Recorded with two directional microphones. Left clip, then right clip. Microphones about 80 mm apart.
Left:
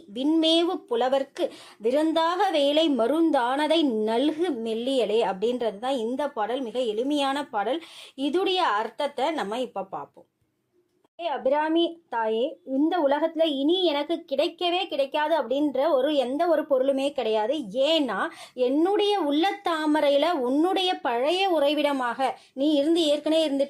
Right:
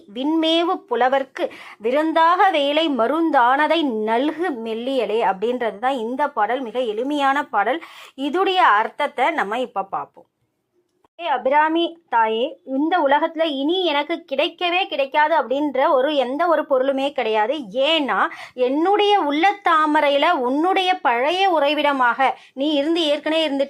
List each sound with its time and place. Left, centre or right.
0.2 s a woman's voice: centre
11.4 s a woman's voice: centre
14.0 s speech: right
14.6 s a woman's voice: left
22.5 s speech: right
23.2 s a woman's voice: centre